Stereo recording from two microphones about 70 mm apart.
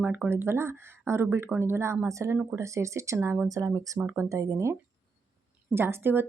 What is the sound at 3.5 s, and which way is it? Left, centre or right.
Speech, right.